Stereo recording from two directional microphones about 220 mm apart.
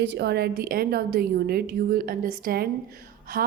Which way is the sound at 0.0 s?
50° right (ahead or behind).